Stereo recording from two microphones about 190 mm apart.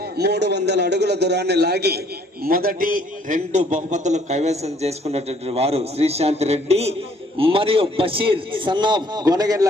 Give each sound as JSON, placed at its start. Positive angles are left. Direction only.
{"t": 0.2, "sound": "a man's voice", "side_deg": -60}